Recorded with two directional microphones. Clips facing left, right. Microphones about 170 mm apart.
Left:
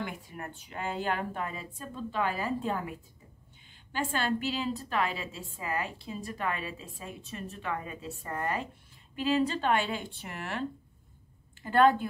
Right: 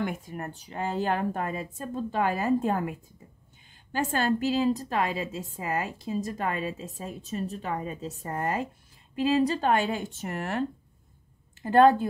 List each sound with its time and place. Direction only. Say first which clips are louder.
0.0 s speech: right 6 dB; 45° right (ahead or behind)
3.9 s a woman's voice: right 4 dB; 45° right (ahead or behind)
11.6 s a woman's voice: right 4 dB; 40° right (ahead or behind)